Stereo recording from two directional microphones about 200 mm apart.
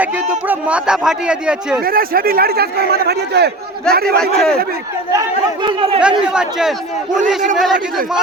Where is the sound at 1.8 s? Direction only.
45° right (ahead or behind).